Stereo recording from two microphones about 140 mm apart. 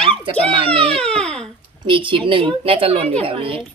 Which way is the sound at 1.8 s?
35° right (ahead or behind).